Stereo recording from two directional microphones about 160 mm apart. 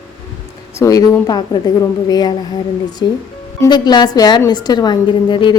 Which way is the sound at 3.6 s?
25° left (ahead or behind).